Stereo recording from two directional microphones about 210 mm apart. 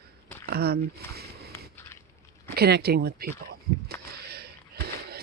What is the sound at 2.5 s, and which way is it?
Speech, 50° right (ahead or behind).